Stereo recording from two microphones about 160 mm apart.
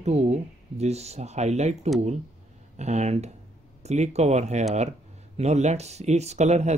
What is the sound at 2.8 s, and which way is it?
Speech, 45° right (ahead or behind).